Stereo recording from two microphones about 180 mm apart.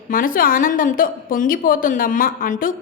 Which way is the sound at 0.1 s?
50° left (ahead or behind).